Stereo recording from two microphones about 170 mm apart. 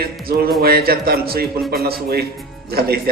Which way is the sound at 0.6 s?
65° right (ahead or behind).